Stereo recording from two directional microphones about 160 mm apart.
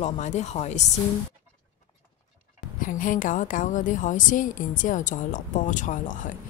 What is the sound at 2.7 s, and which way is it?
A woman's voice, 55° left (ahead or behind).